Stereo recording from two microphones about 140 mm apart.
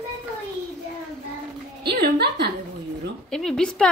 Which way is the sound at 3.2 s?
5° left (ahead or behind).